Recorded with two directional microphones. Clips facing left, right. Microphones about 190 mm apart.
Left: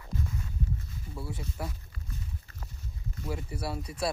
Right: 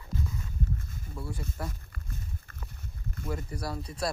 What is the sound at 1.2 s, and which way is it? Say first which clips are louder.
Speech: even; 5° left (ahead or behind).